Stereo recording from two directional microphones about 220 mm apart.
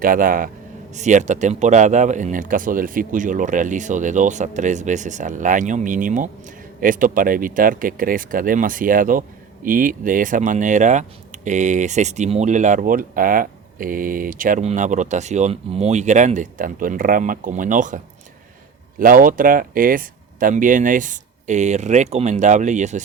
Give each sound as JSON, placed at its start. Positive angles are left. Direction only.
{"t": 0.0, "sound": "speech", "side_deg": -40}